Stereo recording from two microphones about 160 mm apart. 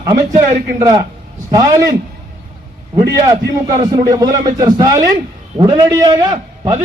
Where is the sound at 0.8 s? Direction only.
20° right (ahead or behind).